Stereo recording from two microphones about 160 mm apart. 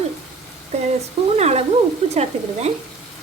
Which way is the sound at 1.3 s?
40° right (ahead or behind).